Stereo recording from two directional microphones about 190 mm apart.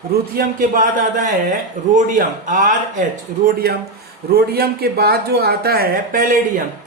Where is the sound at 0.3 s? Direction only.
45° right (ahead or behind).